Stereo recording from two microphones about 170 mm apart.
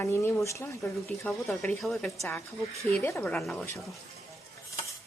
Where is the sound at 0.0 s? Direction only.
10° left (ahead or behind).